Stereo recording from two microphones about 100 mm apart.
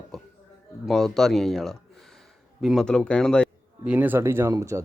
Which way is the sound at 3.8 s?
15° right (ahead or behind).